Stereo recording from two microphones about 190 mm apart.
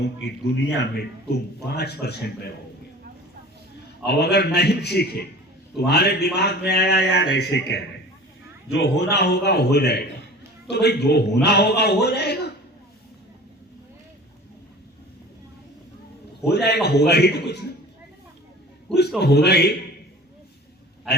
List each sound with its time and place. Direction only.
0.0 s a man's voice: 65° left (ahead or behind)
4.0 s a man's voice: 60° left (ahead or behind)
8.8 s a man's voice: 60° left (ahead or behind)
16.5 s a man's voice: 60° left (ahead or behind)
19.2 s a man's voice: 60° left (ahead or behind)